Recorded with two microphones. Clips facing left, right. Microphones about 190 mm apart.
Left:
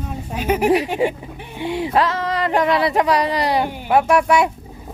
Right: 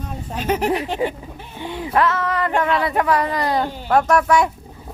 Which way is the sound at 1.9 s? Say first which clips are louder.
Right 2 dB; 25° left (ahead or behind).